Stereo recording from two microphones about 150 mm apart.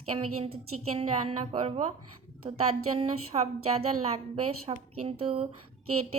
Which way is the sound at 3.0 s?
45° right (ahead or behind).